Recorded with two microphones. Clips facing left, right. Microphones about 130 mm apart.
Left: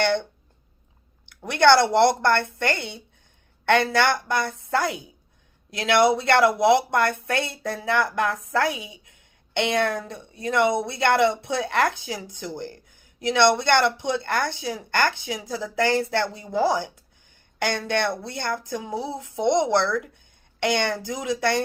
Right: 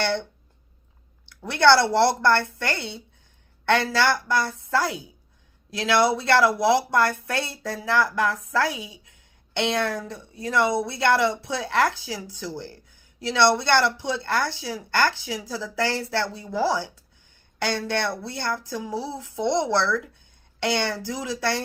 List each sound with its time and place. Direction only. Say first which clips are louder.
1.5 s speech: left 1 dB; 20° left (ahead or behind)